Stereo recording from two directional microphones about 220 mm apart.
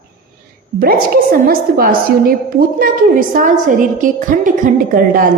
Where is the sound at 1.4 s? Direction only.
40° right (ahead or behind).